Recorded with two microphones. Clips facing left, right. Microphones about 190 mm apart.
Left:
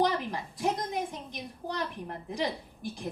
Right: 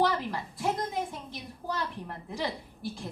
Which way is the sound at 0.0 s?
20° left (ahead or behind).